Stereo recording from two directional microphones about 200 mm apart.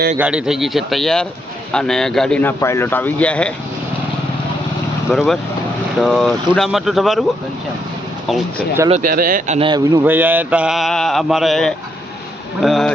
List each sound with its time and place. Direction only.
0.2 s mantra: 5° right (ahead or behind)
1.7 s a man's voice: 5° left (ahead or behind)
5.1 s mantra: centre (ahead or behind)
8.3 s mantra: centre (ahead or behind)
8.9 s speech: 40° right (ahead or behind)
9.6 s speech: 20° right (ahead or behind)
10.0 s mantra: 10° right (ahead or behind)